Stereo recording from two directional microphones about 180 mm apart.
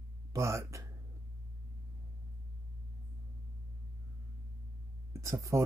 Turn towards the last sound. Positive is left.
turn(degrees=-15)  # may be behind; listen again after turning